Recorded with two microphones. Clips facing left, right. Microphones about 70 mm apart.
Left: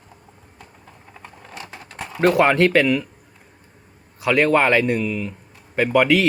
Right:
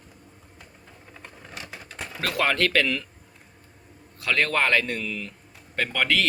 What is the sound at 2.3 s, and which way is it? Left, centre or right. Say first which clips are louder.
Speech: left 8 dB; left.